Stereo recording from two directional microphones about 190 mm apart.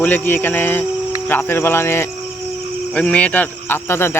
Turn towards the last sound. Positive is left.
turn(degrees=10)  # may be behind; listen again after turning